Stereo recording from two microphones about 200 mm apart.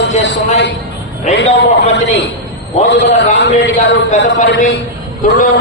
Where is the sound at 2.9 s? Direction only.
60° left (ahead or behind).